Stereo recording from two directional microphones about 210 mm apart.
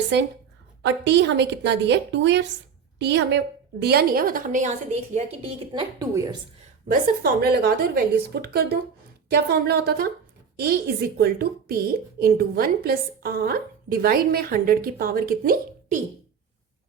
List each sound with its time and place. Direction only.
0.8 s a woman's voice: 55° right (ahead or behind); by 6.3 s 15° right (ahead or behind)
6.8 s a woman's voice: 50° right (ahead or behind)